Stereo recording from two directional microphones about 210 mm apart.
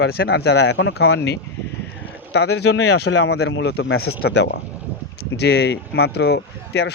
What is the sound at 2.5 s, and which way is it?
Speech, 55° left (ahead or behind).